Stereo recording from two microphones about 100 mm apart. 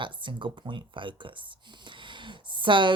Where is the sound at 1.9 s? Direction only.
55° right (ahead or behind).